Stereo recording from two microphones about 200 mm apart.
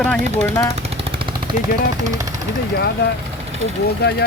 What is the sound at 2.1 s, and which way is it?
Speech, 15° right (ahead or behind).